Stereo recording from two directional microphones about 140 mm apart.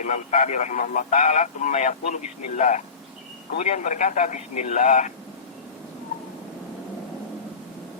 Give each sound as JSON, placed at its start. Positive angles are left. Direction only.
{"t": 0.0, "sound": "speech", "side_deg": 60}